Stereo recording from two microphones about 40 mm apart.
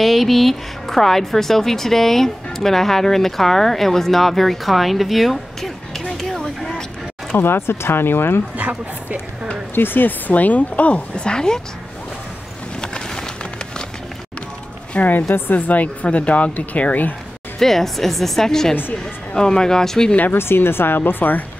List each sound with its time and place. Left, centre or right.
0.0 s speech: centre
6.1 s a sound: centre
7.4 s speech: left
9.8 s speech: left
11.1 s a woman's voice: left
12.8 s a sound: centre
15.0 s speech: left
15.2 s speech: left
15.5 s speech: left
17.6 s speech: centre
20.3 s speech: left